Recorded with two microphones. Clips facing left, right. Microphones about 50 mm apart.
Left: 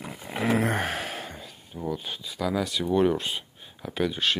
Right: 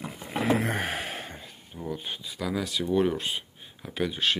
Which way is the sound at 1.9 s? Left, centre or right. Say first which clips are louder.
Left 1 dB; centre.